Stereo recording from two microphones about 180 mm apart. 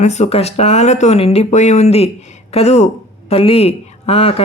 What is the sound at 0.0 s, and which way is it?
Speech, 40° left (ahead or behind).